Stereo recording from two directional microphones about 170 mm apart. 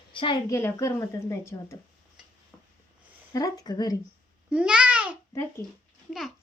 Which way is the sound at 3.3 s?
20° left (ahead or behind).